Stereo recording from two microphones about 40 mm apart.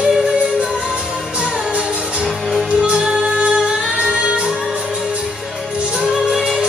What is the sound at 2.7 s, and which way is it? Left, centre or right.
Music, right.